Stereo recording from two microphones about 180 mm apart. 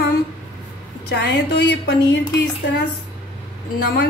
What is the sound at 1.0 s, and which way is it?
Speech, 65° left (ahead or behind).